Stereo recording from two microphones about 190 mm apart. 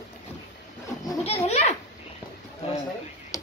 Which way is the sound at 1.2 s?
35° left (ahead or behind).